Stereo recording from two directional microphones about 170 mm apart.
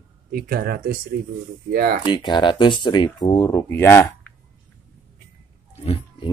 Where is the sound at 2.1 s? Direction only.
25° left (ahead or behind); by 4.3 s 10° left (ahead or behind).